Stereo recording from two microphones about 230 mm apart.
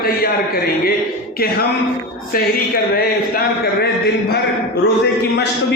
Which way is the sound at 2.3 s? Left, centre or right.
Left.